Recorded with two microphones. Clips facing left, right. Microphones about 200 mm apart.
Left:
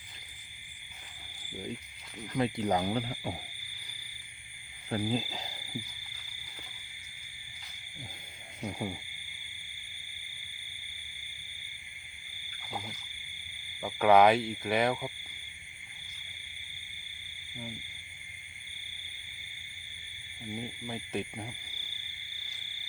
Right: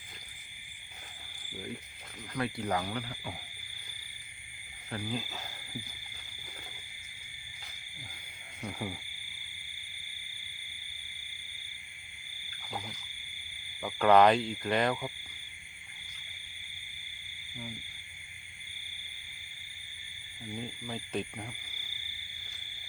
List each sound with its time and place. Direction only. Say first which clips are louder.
2.3 s speech: left 4 dB; 20° left (ahead or behind)
2.8 s speech: left 6 dB; 30° left (ahead or behind)
4.9 s speech: left 5 dB; 30° left (ahead or behind)
8.6 s speech: left 2 dB; 15° left (ahead or behind)
13.8 s speech: even; 5° left (ahead or behind)
20.6 s a sound: even; 10° left (ahead or behind)